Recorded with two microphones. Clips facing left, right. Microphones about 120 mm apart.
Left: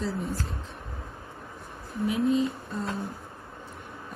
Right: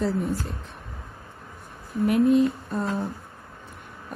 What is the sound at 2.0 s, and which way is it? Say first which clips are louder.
A woman's voice: right 6 dB; 60° right (ahead or behind).